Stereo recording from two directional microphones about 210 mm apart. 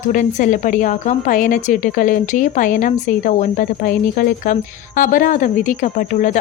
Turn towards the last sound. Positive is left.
turn(degrees=35)  # may be behind; listen again after turning